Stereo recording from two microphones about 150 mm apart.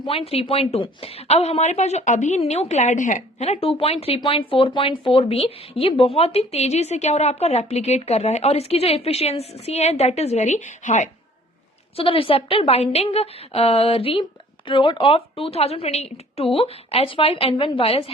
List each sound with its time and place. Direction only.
0.0 s a woman's voice: 40° left (ahead or behind)
11.9 s a woman's voice: 35° left (ahead or behind)